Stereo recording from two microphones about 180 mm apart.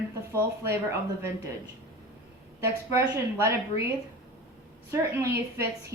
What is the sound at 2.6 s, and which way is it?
A woman's voice, 15° right (ahead or behind).